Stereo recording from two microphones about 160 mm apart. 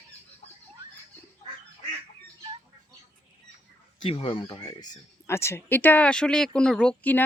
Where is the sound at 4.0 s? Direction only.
35° left (ahead or behind).